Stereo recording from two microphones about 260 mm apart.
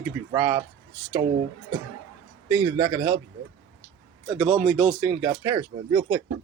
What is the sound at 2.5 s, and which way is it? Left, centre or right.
Speech, centre.